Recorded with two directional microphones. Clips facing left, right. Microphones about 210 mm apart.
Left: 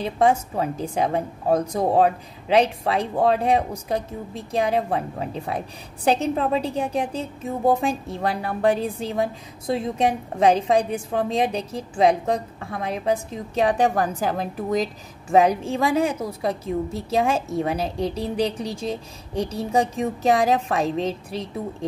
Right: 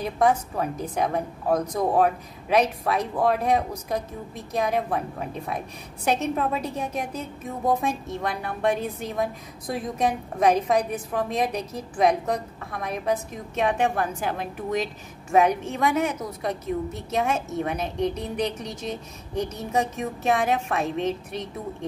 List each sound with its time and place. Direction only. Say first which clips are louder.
0.0 s a woman's voice: left 2 dB; 25° left (ahead or behind)